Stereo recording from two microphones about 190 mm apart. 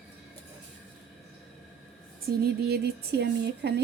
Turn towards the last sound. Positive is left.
turn(degrees=-60)  # may be behind; listen again after turning